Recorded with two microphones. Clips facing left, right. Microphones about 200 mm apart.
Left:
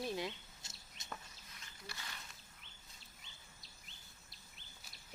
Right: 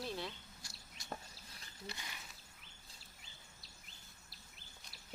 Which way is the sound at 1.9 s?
15° right (ahead or behind).